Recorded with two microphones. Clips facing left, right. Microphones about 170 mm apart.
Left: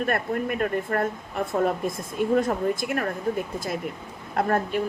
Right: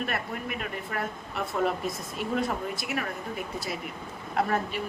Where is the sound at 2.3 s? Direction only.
50° left (ahead or behind).